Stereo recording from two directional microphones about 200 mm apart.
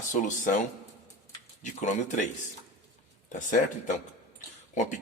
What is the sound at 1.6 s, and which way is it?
Speech, 40° left (ahead or behind).